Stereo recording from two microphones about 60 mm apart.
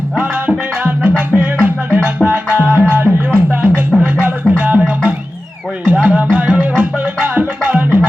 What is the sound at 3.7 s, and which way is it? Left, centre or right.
Music, left.